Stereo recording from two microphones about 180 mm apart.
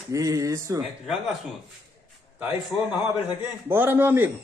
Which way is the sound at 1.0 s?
Centre (ahead or behind).